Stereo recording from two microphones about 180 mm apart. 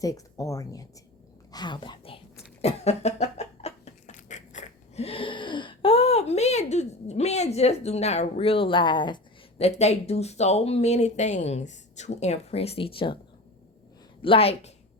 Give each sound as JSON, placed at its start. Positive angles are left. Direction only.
{"t": 0.0, "sound": "a woman's voice", "side_deg": 20}
{"t": 2.6, "sound": "a sound", "side_deg": 35}
{"t": 14.2, "sound": "a woman's voice", "side_deg": 30}